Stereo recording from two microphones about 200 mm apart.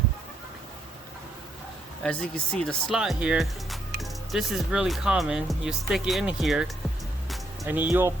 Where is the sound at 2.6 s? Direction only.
Centre (ahead or behind).